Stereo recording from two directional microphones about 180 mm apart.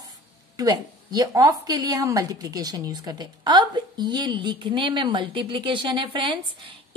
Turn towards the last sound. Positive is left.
turn(degrees=-25)  # may be behind; listen again after turning